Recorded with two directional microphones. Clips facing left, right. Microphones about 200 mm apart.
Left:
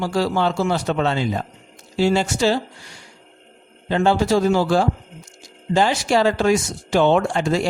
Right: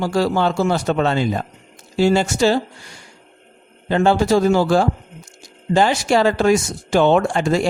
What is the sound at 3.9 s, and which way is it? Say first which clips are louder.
A man's voice: right 2 dB; 50° right (ahead or behind).